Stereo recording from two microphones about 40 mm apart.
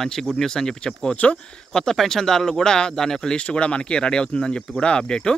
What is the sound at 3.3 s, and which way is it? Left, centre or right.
Speech, left.